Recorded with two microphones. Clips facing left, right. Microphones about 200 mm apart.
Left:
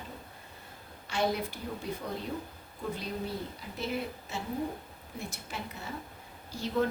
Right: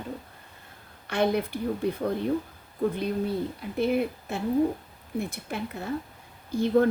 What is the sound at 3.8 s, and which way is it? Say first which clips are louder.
Speech: right 10 dB; 55° right (ahead or behind).